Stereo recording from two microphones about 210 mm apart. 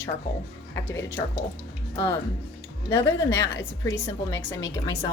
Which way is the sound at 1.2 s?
15° left (ahead or behind).